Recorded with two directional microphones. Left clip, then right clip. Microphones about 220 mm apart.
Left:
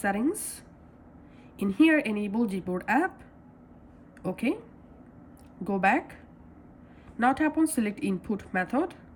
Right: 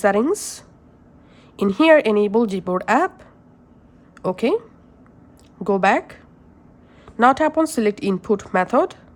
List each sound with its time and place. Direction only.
0.0 s a woman's voice: 15° right (ahead or behind)
4.2 s speech: 15° right (ahead or behind)
5.6 s a woman's voice: 15° right (ahead or behind)
7.2 s a woman's voice: 15° right (ahead or behind)